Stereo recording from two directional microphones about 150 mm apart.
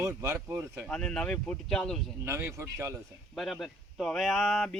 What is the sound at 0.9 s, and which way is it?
Speech, 5° left (ahead or behind).